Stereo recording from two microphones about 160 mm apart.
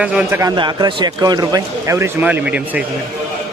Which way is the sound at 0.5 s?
30° right (ahead or behind).